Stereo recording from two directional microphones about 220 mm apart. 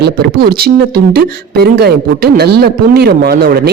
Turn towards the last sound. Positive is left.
turn(degrees=-45)  # may be behind; listen again after turning